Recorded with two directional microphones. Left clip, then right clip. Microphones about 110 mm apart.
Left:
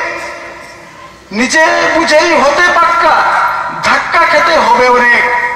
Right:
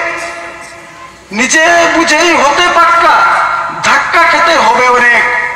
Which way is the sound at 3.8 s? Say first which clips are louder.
Right 1 dB; 35° right (ahead or behind).